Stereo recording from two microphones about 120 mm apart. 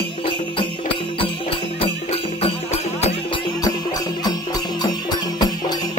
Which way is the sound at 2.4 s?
60° left (ahead or behind).